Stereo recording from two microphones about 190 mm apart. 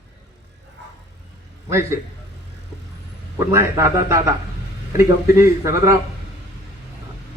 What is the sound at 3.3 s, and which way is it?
A man's voice, 15° right (ahead or behind).